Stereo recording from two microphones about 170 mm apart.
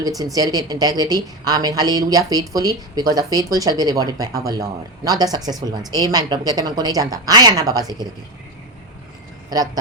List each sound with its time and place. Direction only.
0.3 s a woman's voice: 20° right (ahead or behind)